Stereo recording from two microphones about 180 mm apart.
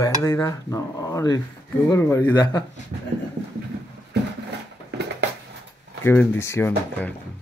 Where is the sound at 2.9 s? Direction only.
35° right (ahead or behind).